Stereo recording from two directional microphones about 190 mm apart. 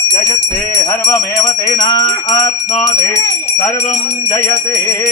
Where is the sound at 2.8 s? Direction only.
15° left (ahead or behind).